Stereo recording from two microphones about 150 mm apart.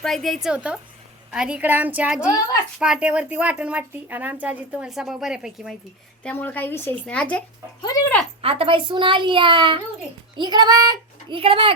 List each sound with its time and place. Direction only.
0.0 s a woman's voice: centre (ahead or behind)
6.2 s speech: 10° left (ahead or behind)
7.8 s speech: 25° left (ahead or behind)
8.4 s a woman's voice: 40° right (ahead or behind)